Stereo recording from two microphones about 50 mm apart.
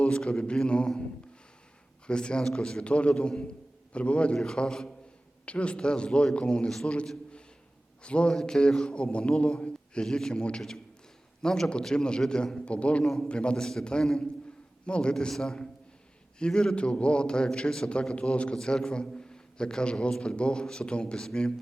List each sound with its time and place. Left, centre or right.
0.2 s a man's voice: centre
2.0 s a man's voice: centre
5.5 s a man's voice: left
15.1 s a man's voice: centre
18.5 s a man's voice: centre